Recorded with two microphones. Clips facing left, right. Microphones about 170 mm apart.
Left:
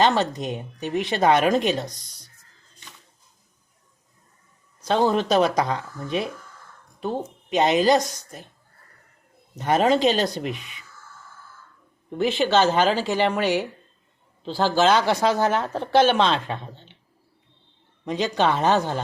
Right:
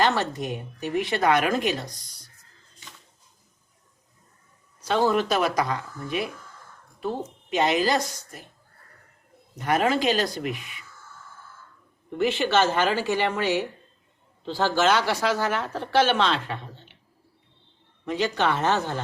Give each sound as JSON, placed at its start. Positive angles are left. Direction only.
{"t": 0.0, "sound": "speech", "side_deg": 20}
{"t": 4.8, "sound": "speech", "side_deg": 20}
{"t": 7.5, "sound": "speech", "side_deg": 20}
{"t": 9.6, "sound": "speech", "side_deg": 25}
{"t": 12.4, "sound": "a woman's voice", "side_deg": 15}
{"t": 18.0, "sound": "a woman's voice", "side_deg": 20}